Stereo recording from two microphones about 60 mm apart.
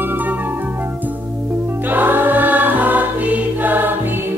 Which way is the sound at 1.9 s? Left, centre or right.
Right.